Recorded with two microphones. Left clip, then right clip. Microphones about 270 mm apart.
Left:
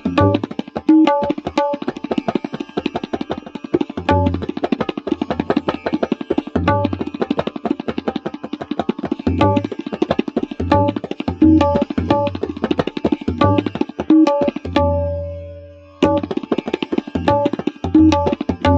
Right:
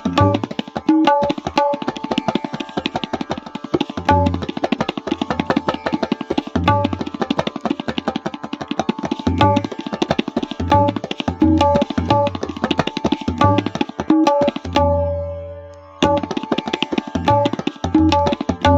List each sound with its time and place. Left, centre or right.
0.0 s tabla: right
16.0 s tabla: right